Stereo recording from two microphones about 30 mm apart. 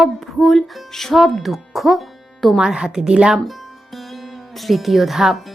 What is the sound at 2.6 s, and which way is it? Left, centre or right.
Speech, right.